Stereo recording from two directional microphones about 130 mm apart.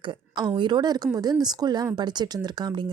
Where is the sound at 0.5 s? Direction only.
35° right (ahead or behind).